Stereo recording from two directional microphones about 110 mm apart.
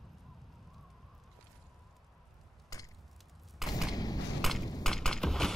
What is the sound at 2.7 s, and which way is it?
Wood, 35° left (ahead or behind).